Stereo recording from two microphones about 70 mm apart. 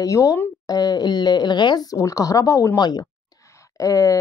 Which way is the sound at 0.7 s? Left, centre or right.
Left.